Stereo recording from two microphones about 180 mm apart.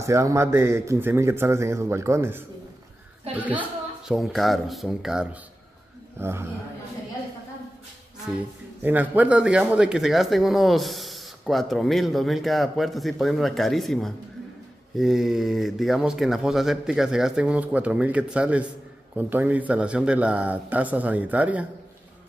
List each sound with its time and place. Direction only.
0.0 s a man's voice: 15° right (ahead or behind)
8.8 s a man's voice: 10° right (ahead or behind)